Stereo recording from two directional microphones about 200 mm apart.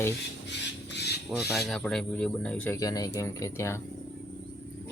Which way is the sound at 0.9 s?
55° left (ahead or behind).